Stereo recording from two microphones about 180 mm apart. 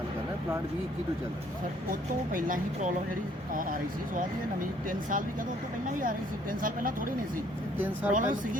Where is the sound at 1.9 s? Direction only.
50° right (ahead or behind).